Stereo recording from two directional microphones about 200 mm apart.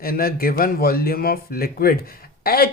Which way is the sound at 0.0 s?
45° left (ahead or behind).